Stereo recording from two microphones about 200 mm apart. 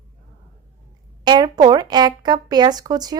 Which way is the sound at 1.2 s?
20° right (ahead or behind).